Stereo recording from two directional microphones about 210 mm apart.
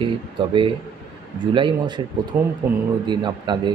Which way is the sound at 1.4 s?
25° right (ahead or behind).